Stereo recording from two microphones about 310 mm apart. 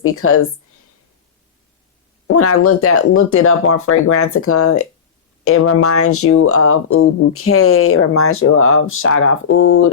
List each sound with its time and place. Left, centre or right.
0.0 s speech: left
2.2 s speech: left